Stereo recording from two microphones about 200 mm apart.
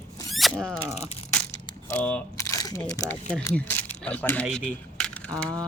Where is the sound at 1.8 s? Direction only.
5° left (ahead or behind).